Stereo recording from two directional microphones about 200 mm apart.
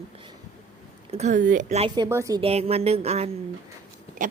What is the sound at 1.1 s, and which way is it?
Speech, 35° right (ahead or behind).